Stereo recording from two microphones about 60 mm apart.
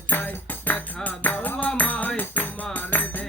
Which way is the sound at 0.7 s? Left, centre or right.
Left.